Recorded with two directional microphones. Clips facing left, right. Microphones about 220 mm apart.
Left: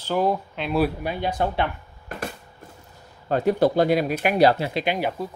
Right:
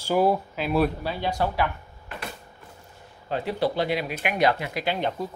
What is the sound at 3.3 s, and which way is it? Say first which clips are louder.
Speech: left 6 dB; 45° left (ahead or behind).